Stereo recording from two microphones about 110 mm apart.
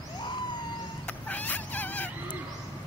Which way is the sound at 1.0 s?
15° left (ahead or behind).